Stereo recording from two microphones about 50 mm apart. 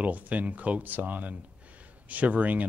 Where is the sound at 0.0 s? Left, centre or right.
Right.